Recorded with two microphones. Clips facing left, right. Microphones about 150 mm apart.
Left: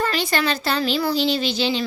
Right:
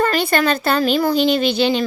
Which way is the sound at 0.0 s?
55° right (ahead or behind).